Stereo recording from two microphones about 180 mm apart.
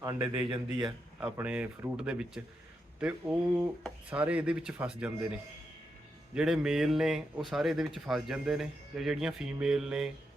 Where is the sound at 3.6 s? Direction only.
5° right (ahead or behind).